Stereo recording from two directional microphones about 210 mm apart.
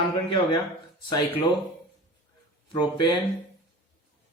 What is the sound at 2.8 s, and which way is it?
Speech, 20° left (ahead or behind).